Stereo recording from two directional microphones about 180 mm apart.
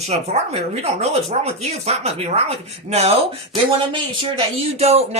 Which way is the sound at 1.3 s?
35° right (ahead or behind).